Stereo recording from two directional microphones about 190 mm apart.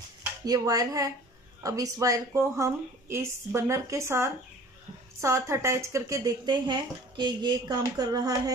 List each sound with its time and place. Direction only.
0.5 s speech: 20° right (ahead or behind)